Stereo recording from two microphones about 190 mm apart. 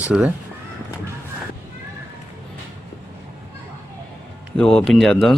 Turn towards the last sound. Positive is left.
turn(degrees=0)  # may be behind; listen again after turning